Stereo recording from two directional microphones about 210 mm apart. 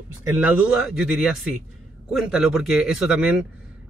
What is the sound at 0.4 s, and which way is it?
Speech, 5° right (ahead or behind).